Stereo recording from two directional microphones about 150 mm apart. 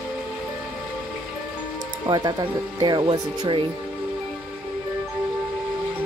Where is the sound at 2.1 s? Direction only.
25° right (ahead or behind).